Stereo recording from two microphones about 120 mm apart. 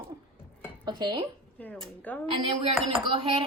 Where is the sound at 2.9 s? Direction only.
45° right (ahead or behind).